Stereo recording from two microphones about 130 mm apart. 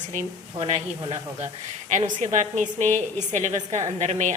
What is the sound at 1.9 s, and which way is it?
A woman's voice, 65° right (ahead or behind).